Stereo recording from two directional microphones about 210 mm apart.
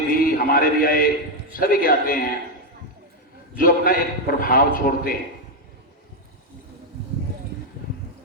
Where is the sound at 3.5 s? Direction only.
40° left (ahead or behind).